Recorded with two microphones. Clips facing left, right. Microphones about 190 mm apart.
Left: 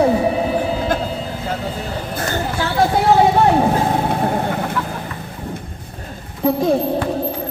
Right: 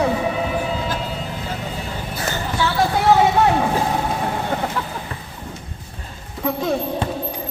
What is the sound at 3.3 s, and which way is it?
Vehicle, 35° left (ahead or behind).